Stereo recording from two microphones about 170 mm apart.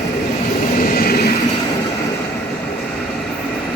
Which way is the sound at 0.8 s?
55° left (ahead or behind).